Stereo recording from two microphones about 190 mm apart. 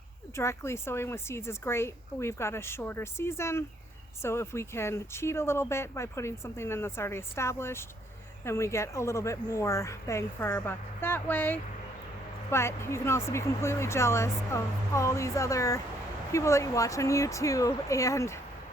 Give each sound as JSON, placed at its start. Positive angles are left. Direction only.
{"t": 0.3, "sound": "speech", "side_deg": 15}